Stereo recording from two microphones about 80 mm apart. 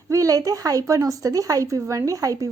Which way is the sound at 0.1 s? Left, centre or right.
Right.